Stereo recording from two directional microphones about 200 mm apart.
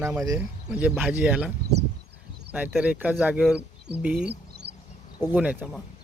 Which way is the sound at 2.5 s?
5° right (ahead or behind).